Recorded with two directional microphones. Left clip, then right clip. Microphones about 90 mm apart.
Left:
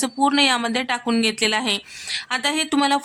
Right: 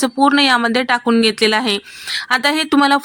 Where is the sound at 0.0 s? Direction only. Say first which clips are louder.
Right 5 dB; 35° right (ahead or behind).